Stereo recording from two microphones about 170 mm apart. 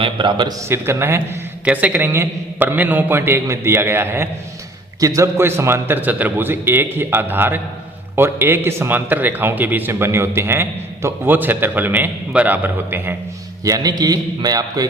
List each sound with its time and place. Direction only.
0.0 s a man's voice: 25° right (ahead or behind)
0.7 s a man's voice: 15° right (ahead or behind)
13.7 s a man's voice: 20° right (ahead or behind)